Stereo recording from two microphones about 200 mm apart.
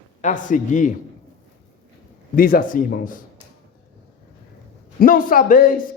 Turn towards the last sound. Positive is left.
turn(degrees=45)  # may be behind; listen again after turning